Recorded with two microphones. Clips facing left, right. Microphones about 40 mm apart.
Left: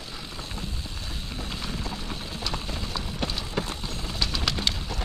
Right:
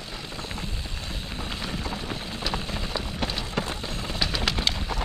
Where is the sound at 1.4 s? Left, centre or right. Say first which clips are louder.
Right 2 dB; centre.